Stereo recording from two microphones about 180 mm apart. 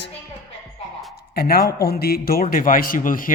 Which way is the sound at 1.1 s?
60° left (ahead or behind).